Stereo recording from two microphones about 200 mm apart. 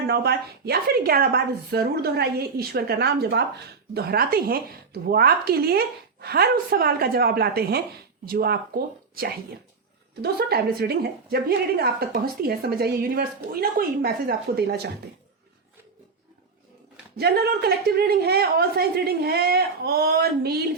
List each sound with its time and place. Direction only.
0.1 s a woman's voice: 55° right (ahead or behind)
17.2 s a woman's voice: 50° right (ahead or behind)